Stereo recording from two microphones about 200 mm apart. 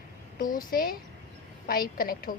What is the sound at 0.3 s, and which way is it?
A woman's voice, 45° left (ahead or behind).